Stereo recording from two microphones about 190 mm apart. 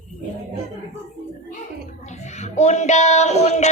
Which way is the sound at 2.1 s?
35° left (ahead or behind).